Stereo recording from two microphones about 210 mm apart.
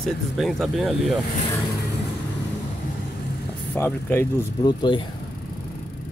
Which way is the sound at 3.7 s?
10° left (ahead or behind).